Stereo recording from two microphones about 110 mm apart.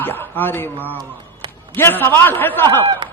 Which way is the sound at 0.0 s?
20° left (ahead or behind).